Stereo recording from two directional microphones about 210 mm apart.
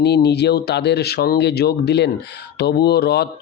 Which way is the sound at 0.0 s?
50° left (ahead or behind).